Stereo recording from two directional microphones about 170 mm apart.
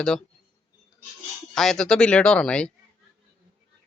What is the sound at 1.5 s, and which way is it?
A man's voice, centre (ahead or behind).